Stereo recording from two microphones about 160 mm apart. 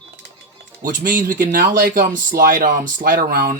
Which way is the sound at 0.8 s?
55° right (ahead or behind).